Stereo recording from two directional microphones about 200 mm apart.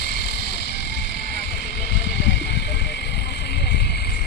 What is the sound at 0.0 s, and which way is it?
Music, 55° left (ahead or behind).